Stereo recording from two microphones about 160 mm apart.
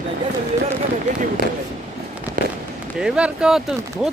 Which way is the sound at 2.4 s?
60° right (ahead or behind).